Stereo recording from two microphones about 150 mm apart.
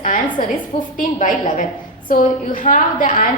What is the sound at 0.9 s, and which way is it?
A woman's voice, 60° left (ahead or behind).